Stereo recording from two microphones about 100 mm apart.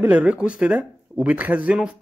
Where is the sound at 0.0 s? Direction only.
15° right (ahead or behind).